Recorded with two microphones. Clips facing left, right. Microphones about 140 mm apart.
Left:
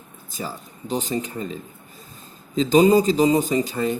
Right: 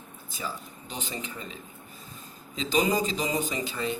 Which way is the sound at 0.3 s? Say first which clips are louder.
Left 4 dB; 40° left (ahead or behind).